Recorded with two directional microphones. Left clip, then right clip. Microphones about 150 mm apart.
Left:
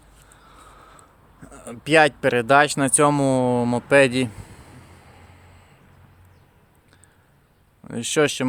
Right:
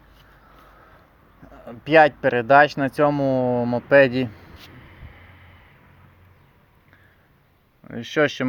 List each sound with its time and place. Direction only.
1.4 s speech: 40° left (ahead or behind)
3.8 s speech: 20° left (ahead or behind)
7.9 s speech: 40° left (ahead or behind)